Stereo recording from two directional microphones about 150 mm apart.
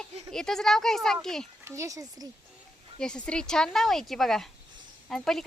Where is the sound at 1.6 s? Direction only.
20° right (ahead or behind).